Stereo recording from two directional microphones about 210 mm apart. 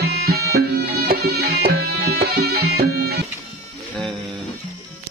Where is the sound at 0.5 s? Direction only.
45° right (ahead or behind).